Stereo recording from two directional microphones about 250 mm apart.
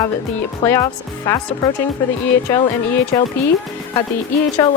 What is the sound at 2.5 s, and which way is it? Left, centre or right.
Speech, centre.